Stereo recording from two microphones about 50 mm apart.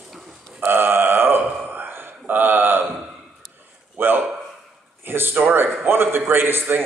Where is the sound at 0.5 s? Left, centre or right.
Right.